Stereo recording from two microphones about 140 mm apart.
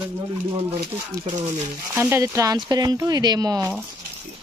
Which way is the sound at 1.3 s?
60° right (ahead or behind).